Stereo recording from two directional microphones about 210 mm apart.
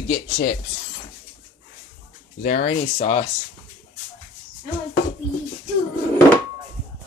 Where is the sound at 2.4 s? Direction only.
35° left (ahead or behind).